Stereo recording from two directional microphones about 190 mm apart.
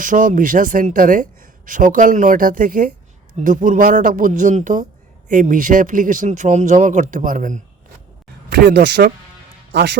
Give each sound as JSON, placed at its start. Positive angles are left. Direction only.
{"t": 0.0, "sound": "speech", "side_deg": -45}
{"t": 8.4, "sound": "speech", "side_deg": -55}